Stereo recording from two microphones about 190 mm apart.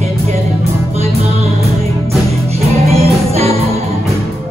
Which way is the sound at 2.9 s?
35° right (ahead or behind).